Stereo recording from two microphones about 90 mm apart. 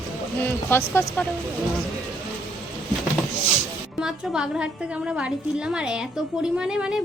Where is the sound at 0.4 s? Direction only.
25° left (ahead or behind).